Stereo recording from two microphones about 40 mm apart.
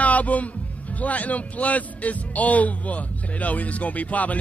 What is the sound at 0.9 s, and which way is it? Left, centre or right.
A man's voice, left.